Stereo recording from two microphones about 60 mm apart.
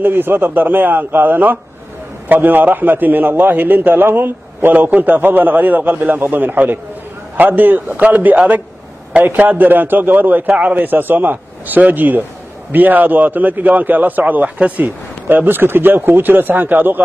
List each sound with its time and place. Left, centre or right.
0.0 s a man's voice: right